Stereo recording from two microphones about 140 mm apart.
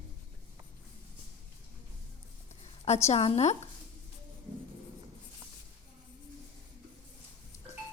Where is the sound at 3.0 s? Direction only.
50° left (ahead or behind).